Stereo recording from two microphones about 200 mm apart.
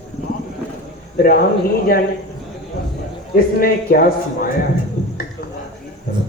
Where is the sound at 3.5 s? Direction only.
45° left (ahead or behind).